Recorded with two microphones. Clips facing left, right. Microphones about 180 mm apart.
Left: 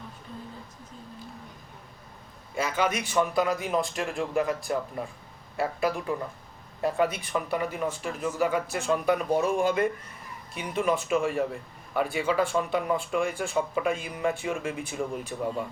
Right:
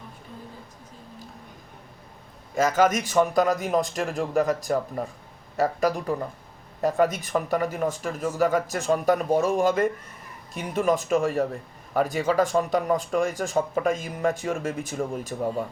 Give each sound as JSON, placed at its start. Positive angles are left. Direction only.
{"t": 2.6, "sound": "speech", "side_deg": -45}